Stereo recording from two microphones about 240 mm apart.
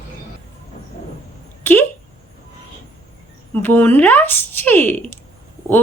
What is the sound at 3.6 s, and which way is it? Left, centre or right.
Speech, centre.